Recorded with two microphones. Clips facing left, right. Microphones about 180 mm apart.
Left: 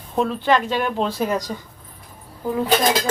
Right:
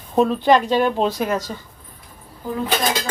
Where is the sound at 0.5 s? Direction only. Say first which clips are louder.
Right 3 dB; 35° right (ahead or behind).